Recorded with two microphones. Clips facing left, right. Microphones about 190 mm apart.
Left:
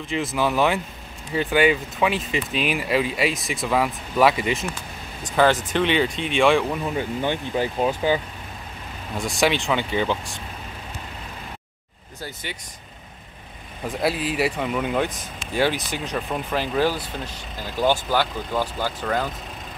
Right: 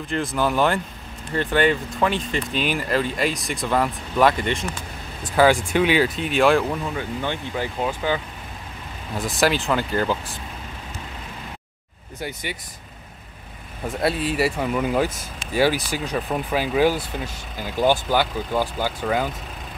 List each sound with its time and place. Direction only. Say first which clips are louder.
0.1 s speech: even; centre (ahead or behind)
5.3 s speech: right 2 dB; 10° right (ahead or behind)
6.9 s speech: left 2 dB; 15° left (ahead or behind)
9.1 s speech: right 1 dB; centre (ahead or behind)
13.8 s speech: right 1 dB; centre (ahead or behind)